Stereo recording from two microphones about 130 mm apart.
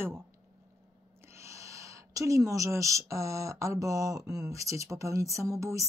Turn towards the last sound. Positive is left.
turn(degrees=-25)  # may be behind; listen again after turning